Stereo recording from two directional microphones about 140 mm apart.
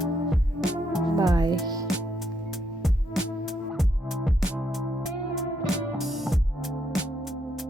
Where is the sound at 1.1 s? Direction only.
25° right (ahead or behind).